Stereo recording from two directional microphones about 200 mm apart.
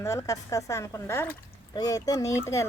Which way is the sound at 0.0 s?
15° left (ahead or behind).